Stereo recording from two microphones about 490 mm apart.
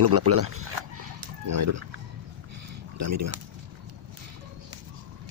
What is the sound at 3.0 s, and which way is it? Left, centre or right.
Speech, right.